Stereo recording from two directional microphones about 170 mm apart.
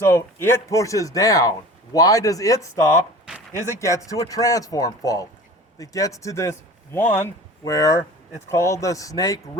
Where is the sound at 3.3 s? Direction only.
10° right (ahead or behind).